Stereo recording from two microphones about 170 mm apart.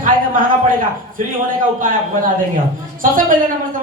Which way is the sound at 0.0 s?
55° right (ahead or behind).